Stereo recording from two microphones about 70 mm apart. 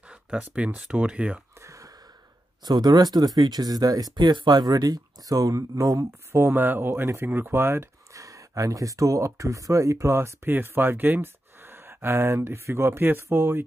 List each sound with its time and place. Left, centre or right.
0.1 s speech: centre
1.6 s a sound: right
2.6 s speech: right
6.3 s speech: right
8.1 s speech: right